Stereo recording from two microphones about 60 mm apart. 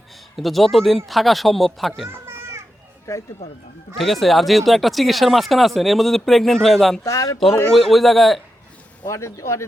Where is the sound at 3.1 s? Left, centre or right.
Left.